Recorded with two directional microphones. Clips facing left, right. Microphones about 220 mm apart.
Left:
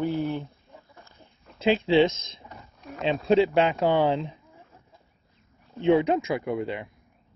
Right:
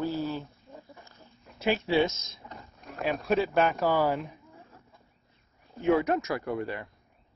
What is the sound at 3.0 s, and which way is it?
Speech, 25° left (ahead or behind).